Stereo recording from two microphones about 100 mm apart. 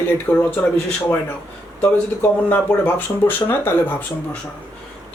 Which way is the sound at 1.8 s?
20° left (ahead or behind).